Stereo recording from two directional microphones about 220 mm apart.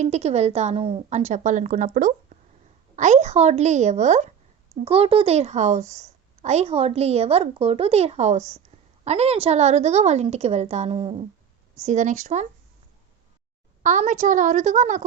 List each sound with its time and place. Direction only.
0.0 s a woman's voice: 30° right (ahead or behind)
13.8 s a woman's voice: 35° right (ahead or behind)